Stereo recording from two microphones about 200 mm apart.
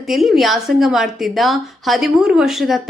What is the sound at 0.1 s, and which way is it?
A woman's voice, centre (ahead or behind).